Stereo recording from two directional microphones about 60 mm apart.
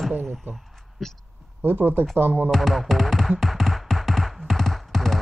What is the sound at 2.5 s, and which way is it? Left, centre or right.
Music, centre.